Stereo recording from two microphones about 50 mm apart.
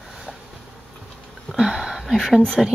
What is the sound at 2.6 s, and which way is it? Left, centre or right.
Speech, centre.